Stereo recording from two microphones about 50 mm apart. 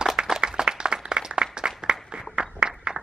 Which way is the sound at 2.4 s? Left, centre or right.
Centre.